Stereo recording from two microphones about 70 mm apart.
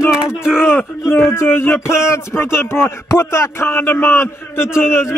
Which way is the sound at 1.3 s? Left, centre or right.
Left.